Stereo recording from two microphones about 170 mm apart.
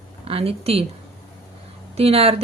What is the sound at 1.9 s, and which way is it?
Speech, 35° right (ahead or behind).